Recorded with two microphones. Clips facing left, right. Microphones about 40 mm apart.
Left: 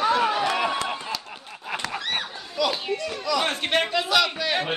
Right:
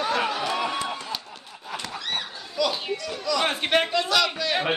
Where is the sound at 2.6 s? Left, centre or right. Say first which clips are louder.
Left 1 dB; centre.